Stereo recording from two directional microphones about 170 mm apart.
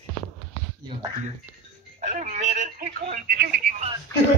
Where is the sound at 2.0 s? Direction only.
45° right (ahead or behind).